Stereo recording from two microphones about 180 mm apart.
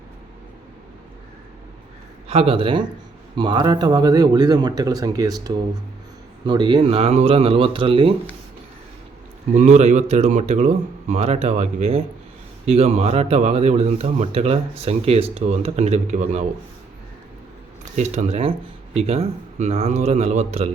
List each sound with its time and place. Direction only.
2.2 s speech: 35° right (ahead or behind)
9.5 s speech: 40° right (ahead or behind)
17.9 s speech: 40° right (ahead or behind)